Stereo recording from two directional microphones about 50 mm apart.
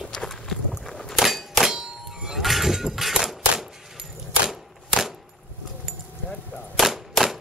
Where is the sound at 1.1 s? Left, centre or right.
Centre.